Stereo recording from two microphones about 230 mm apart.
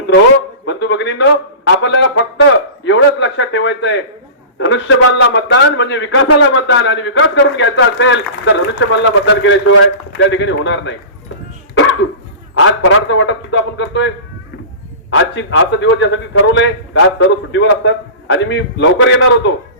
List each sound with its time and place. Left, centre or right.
0.6 s a sound: left
4.5 s a man's voice: left
12.5 s a man's voice: left
15.1 s a man's voice: left